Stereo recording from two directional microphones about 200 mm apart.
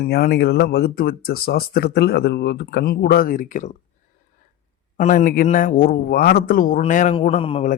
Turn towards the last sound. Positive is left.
turn(degrees=25)  # may be behind; listen again after turning